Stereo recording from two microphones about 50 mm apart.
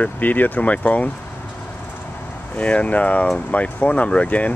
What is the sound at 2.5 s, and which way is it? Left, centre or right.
Speech, left.